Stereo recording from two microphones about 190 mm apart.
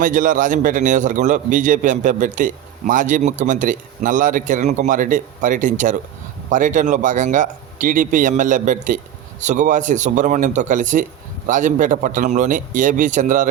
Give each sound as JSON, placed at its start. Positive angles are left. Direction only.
{"t": 0.0, "sound": "a man's voice", "side_deg": -45}